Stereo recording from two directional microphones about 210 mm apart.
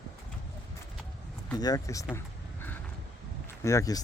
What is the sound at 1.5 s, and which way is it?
Speech, 15° left (ahead or behind).